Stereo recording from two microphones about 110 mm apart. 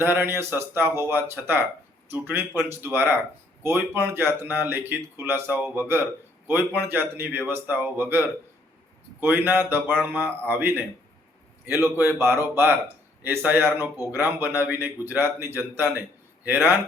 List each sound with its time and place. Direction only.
0.0 s a man's voice: 20° right (ahead or behind)